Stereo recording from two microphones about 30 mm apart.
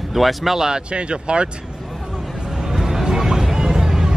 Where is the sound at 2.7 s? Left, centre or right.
Centre.